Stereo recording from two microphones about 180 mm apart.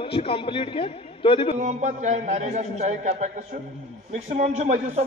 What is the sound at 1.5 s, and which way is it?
A man's voice, 40° right (ahead or behind).